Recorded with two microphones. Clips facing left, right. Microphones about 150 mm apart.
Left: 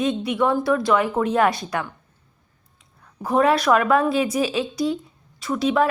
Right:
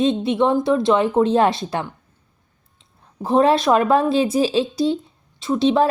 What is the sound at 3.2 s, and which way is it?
A woman's voice, 25° right (ahead or behind).